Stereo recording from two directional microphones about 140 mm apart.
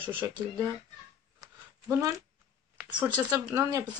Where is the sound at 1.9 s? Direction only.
20° right (ahead or behind).